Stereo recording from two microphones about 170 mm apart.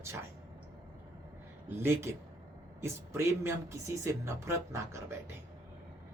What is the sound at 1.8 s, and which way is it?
Speech, 15° right (ahead or behind).